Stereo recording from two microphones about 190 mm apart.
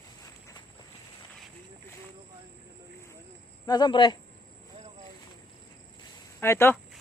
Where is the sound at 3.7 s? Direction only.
25° left (ahead or behind).